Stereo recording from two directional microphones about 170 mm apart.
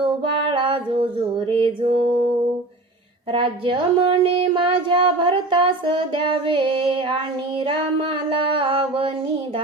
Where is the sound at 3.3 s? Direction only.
30° right (ahead or behind).